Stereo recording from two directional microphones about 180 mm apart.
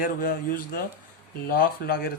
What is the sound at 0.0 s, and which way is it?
Speech, 50° left (ahead or behind).